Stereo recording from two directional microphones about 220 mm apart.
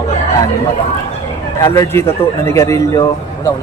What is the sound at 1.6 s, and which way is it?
Speech, 15° left (ahead or behind).